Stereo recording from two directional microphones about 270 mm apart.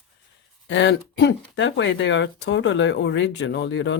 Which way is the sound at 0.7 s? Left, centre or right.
Left.